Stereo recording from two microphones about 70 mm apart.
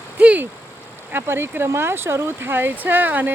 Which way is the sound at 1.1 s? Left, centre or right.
Right.